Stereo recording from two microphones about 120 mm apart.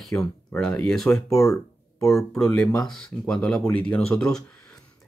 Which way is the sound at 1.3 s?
25° left (ahead or behind).